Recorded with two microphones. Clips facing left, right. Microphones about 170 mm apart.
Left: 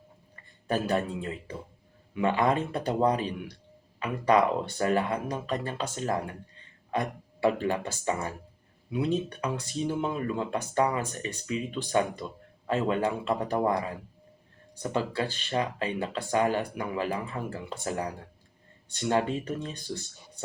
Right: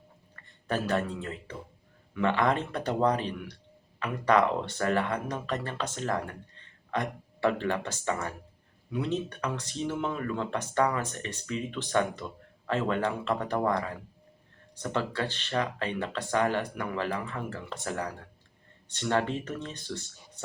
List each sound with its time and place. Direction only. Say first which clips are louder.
0.3 s speech: left 2 dB; 15° left (ahead or behind)